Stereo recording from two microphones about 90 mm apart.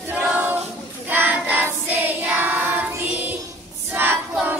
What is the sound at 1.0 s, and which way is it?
Child singing, 20° right (ahead or behind).